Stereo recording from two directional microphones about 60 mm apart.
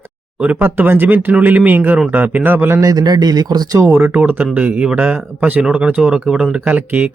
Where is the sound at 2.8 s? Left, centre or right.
Right.